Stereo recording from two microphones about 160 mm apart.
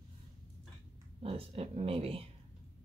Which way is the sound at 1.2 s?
40° right (ahead or behind).